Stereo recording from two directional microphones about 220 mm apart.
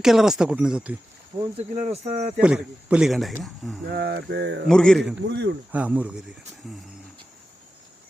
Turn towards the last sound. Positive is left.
turn(degrees=0)  # may be behind; listen again after turning